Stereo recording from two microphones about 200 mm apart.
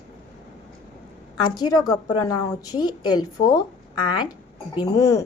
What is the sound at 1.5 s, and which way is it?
A woman's voice, 20° left (ahead or behind).